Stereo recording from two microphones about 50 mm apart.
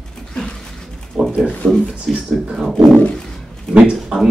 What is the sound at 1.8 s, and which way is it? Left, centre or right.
Speech, centre.